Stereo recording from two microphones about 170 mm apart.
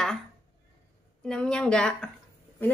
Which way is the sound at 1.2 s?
5° left (ahead or behind).